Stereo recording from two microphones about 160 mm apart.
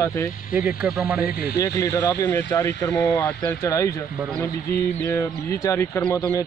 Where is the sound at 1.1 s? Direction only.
75° left (ahead or behind).